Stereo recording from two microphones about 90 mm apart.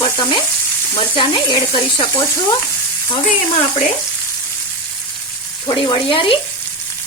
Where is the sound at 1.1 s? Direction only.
65° left (ahead or behind).